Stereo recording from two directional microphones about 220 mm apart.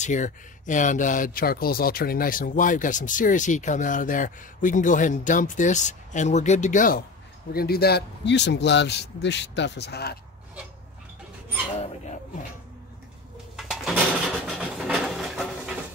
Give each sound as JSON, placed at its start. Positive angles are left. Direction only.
{"t": 0.0, "sound": "speech", "side_deg": 35}
{"t": 13.6, "sound": "bird", "side_deg": 0}